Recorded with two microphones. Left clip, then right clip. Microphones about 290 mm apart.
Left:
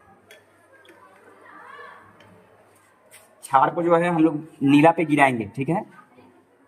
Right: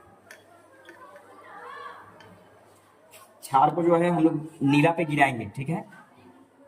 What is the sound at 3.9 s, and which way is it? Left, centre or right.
A man's voice, centre.